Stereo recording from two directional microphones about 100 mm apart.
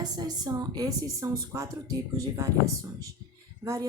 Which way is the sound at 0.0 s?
45° right (ahead or behind).